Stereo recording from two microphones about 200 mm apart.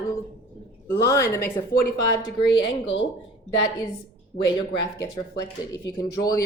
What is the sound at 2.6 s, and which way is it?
Speech, 65° left (ahead or behind).